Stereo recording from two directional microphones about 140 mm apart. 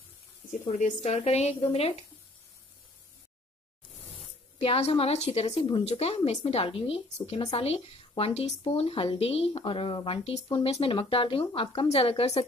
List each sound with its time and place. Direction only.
0.7 s a woman's voice: 55° left (ahead or behind)
4.6 s a woman's voice: 45° left (ahead or behind)